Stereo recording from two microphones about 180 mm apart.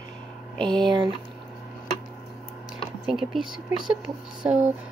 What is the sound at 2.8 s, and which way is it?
Speech, centre (ahead or behind).